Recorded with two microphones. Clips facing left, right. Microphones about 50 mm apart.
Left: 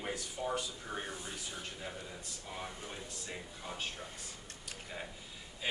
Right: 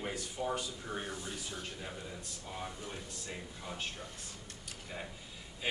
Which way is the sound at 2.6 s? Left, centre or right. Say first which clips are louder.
Right 1 dB; centre.